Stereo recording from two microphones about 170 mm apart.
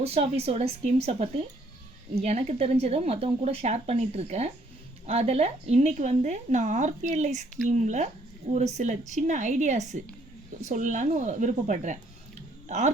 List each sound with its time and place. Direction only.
0.0 s a woman's voice: 35° right (ahead or behind)